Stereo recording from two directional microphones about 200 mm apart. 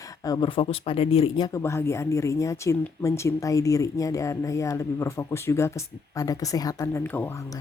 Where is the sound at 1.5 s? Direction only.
15° left (ahead or behind).